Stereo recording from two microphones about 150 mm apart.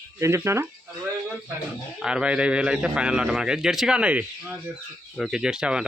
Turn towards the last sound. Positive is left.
turn(degrees=-5)  # may be behind; listen again after turning